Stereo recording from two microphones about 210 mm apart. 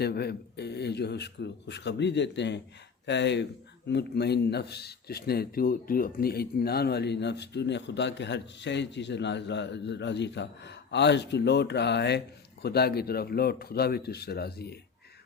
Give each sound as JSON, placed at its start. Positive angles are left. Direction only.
{"t": 0.0, "sound": "a man's voice", "side_deg": 50}